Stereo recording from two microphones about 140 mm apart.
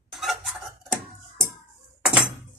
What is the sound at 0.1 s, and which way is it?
Dishes, centre (ahead or behind).